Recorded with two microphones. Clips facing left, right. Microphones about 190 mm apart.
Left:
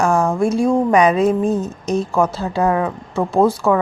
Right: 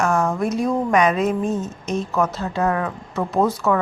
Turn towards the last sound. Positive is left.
turn(degrees=30)  # may be behind; listen again after turning